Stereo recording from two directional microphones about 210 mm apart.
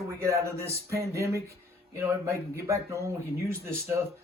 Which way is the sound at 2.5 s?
15° right (ahead or behind).